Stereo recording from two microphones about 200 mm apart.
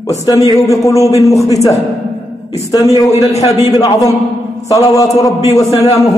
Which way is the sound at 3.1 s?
30° left (ahead or behind).